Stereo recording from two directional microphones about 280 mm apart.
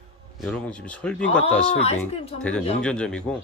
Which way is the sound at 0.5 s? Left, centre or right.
Centre.